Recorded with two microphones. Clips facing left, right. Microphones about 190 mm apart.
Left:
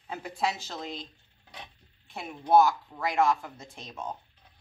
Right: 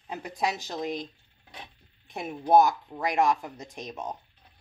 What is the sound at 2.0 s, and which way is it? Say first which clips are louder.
Speech: right 3 dB; 20° right (ahead or behind).